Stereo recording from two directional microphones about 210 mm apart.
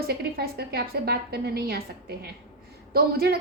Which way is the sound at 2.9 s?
45° right (ahead or behind).